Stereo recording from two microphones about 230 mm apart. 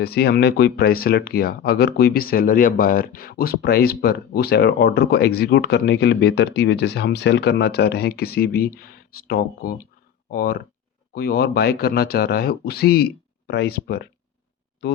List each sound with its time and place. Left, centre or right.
0.0 s speech: left